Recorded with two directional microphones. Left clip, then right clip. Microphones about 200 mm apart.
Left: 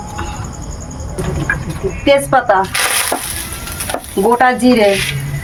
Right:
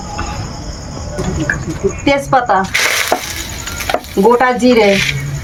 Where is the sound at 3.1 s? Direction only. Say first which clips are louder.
Right 4 dB; 35° right (ahead or behind).